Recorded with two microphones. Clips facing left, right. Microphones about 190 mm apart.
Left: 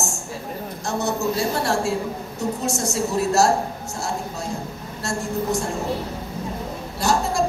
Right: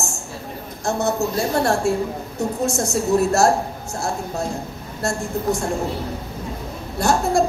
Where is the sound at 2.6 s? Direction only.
55° right (ahead or behind).